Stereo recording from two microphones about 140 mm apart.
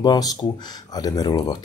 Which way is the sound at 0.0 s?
30° left (ahead or behind).